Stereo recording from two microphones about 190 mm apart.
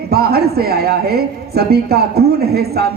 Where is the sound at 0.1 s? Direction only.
55° right (ahead or behind).